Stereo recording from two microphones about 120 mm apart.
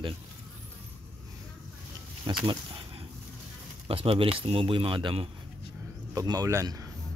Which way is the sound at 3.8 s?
50° right (ahead or behind).